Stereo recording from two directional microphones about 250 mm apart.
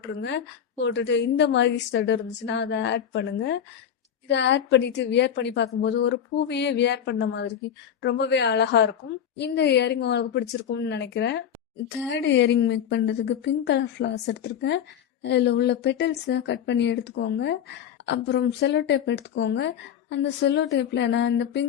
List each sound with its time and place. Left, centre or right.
0.0 s a woman's voice: left